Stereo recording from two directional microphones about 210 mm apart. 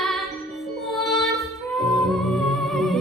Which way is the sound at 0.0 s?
Centre (ahead or behind).